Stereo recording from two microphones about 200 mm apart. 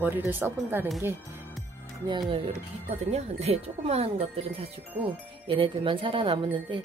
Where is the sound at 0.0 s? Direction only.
10° right (ahead or behind).